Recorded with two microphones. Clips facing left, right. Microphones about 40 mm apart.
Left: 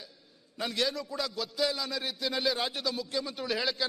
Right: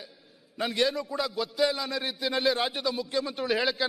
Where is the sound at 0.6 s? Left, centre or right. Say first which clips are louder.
Right 4 dB; centre.